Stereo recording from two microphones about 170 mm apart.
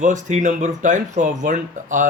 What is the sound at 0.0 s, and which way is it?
Speech, 45° right (ahead or behind).